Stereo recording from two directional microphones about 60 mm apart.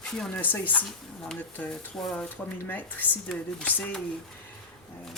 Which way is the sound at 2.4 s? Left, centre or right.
Left.